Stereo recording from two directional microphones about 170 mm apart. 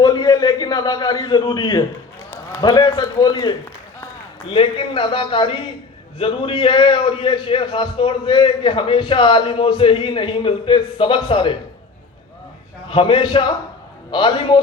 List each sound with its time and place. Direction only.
0.0 s a sound: 25° left (ahead or behind)
2.3 s a man's voice: 20° left (ahead or behind)
12.9 s a man's voice: 30° left (ahead or behind)